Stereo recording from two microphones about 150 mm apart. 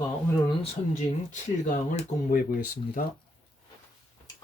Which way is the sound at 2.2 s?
65° left (ahead or behind).